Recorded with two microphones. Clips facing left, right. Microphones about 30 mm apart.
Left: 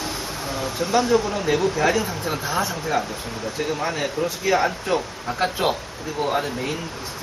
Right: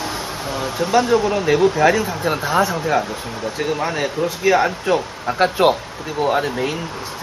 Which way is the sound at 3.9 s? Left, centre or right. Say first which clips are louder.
Right 3 dB; right.